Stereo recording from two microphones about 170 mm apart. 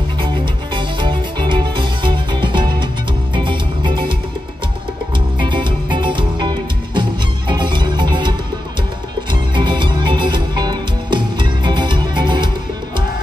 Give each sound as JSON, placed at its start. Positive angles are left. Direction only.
{"t": 0.7, "sound": "music", "side_deg": -30}
{"t": 5.4, "sound": "music", "side_deg": -25}